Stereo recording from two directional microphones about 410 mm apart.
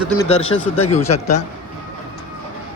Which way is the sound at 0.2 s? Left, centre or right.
Centre.